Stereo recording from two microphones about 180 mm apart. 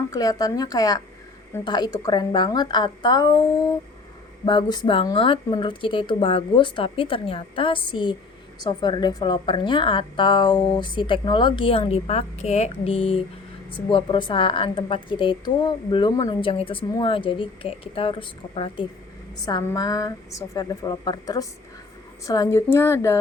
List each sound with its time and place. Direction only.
0.1 s a woman's voice: 20° left (ahead or behind)